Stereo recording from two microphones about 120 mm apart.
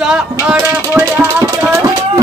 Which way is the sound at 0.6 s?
20° right (ahead or behind).